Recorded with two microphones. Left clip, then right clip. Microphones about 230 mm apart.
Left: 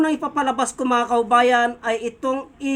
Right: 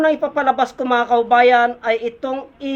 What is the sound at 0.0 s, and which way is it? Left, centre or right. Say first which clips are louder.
Speech: right 5 dB; centre.